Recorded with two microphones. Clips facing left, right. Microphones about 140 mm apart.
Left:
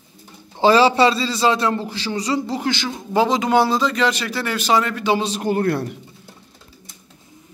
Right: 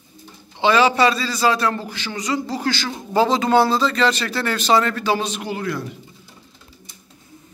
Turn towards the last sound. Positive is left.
turn(degrees=60)  # may be behind; listen again after turning